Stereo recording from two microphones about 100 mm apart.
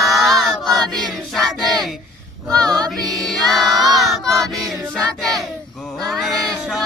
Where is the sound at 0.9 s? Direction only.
Centre (ahead or behind).